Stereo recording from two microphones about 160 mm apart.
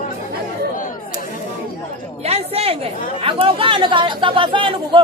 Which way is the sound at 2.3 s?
40° right (ahead or behind).